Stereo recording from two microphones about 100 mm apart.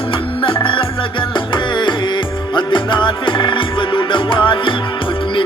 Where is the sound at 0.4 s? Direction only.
60° left (ahead or behind).